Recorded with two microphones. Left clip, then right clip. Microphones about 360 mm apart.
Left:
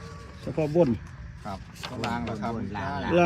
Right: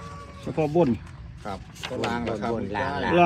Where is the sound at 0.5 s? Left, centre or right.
Centre.